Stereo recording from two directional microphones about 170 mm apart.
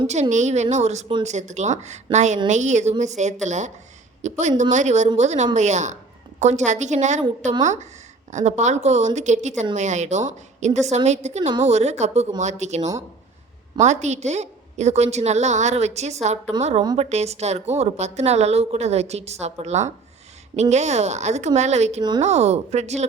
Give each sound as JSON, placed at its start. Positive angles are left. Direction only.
{"t": 0.1, "sound": "a woman's voice", "side_deg": -45}